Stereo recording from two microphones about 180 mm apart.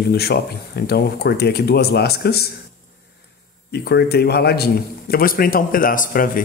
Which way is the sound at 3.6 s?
65° left (ahead or behind).